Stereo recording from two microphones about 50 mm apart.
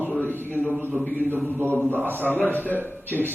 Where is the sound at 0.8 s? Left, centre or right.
Right.